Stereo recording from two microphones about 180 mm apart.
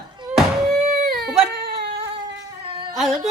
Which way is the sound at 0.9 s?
50° right (ahead or behind).